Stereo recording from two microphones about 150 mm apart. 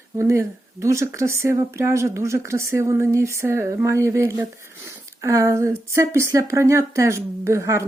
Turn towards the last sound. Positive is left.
turn(degrees=-20)  # may be behind; listen again after turning